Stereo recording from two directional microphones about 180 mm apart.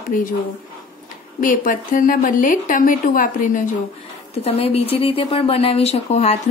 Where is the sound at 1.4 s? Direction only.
50° left (ahead or behind).